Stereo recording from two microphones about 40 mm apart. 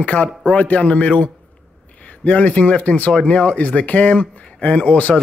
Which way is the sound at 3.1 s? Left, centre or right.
Left.